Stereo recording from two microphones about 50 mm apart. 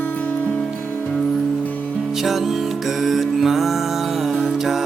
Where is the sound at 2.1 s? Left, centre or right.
Centre.